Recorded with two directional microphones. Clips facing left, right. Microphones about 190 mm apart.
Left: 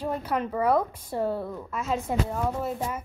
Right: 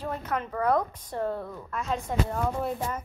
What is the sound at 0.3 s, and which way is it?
A woman's voice, 10° left (ahead or behind).